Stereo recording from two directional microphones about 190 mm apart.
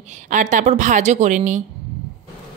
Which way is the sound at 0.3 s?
40° right (ahead or behind).